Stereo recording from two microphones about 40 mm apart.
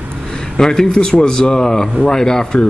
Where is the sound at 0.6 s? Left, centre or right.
Centre.